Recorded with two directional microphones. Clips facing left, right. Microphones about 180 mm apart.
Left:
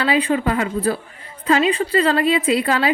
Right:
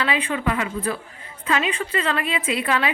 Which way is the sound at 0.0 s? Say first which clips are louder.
Left 5 dB; 35° left (ahead or behind).